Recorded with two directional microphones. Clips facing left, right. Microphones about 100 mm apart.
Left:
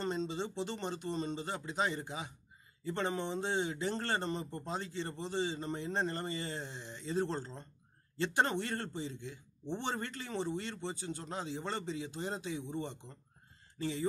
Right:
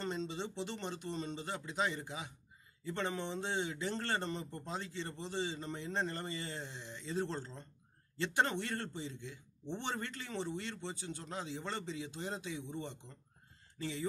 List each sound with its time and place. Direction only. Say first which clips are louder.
0.0 s speech: left 3 dB; 35° left (ahead or behind)